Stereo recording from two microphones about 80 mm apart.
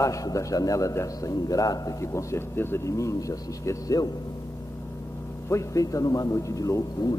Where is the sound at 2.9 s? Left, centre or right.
Left.